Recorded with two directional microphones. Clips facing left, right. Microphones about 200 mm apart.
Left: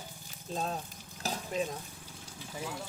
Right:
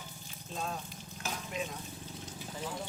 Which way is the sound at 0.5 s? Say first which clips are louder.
Left 3 dB; 35° left (ahead or behind).